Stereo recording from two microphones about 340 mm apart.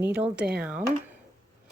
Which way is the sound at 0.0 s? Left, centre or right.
Centre.